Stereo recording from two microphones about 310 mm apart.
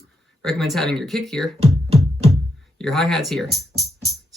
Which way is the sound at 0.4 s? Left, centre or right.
Centre.